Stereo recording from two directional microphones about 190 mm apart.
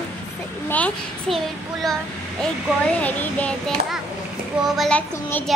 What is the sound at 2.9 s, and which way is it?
A child's voice, 5° left (ahead or behind).